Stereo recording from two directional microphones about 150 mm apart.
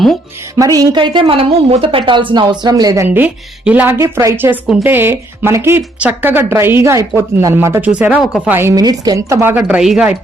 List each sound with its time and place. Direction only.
0.5 s a woman's voice: 25° right (ahead or behind)
3.2 s speech: 10° right (ahead or behind)
8.5 s speech: 20° right (ahead or behind); by 10.2 s 5° right (ahead or behind)